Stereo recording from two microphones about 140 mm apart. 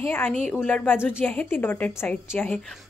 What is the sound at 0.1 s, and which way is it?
A woman's voice, 15° left (ahead or behind).